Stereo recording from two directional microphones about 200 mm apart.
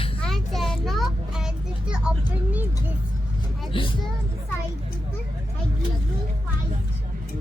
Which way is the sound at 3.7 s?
25° left (ahead or behind).